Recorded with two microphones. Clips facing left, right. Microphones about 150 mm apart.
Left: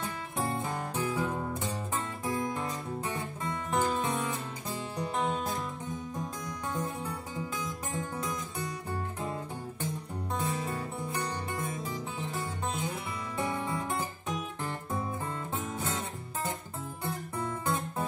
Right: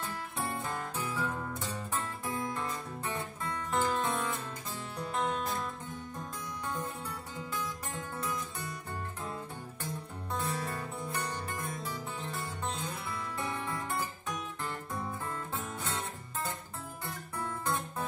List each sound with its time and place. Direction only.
0.0 s music: 20° left (ahead or behind)
10.4 s music: 20° left (ahead or behind)
12.7 s music: 20° left (ahead or behind)
17.0 s music: 20° left (ahead or behind)